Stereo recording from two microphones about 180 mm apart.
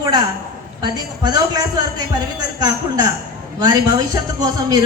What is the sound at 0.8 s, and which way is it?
A woman's voice, 20° right (ahead or behind).